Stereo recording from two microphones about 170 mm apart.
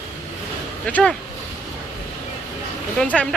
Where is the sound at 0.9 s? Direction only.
10° left (ahead or behind).